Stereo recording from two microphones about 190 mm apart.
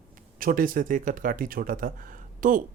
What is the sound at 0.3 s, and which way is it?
Speech, 50° right (ahead or behind).